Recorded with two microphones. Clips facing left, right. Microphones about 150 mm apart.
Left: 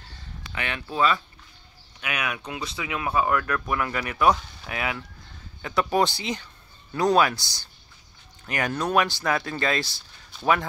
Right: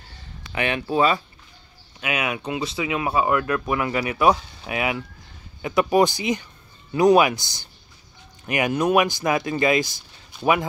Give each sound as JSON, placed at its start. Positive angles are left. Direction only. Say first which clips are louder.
{"t": 0.5, "sound": "speech", "louder": "right 8 dB", "side_deg": -15}